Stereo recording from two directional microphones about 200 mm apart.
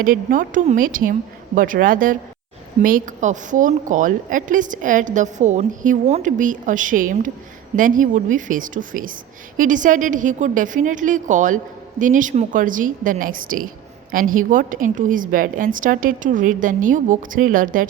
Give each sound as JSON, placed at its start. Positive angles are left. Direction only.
{"t": 0.0, "sound": "a woman's voice", "side_deg": -45}